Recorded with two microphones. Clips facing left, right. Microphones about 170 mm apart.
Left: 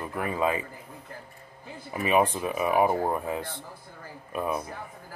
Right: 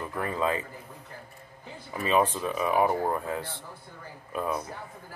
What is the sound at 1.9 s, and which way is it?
Speech, 15° left (ahead or behind).